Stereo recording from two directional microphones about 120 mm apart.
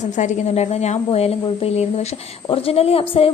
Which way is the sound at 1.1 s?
60° left (ahead or behind).